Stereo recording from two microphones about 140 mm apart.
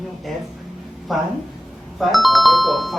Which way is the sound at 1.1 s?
Centre (ahead or behind).